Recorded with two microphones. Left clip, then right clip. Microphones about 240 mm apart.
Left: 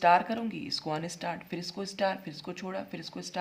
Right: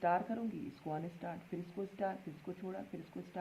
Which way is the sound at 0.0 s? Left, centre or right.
Left.